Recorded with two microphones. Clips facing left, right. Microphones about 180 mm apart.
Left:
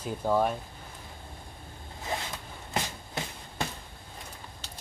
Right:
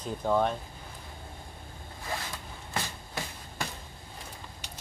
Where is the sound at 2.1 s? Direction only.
20° left (ahead or behind).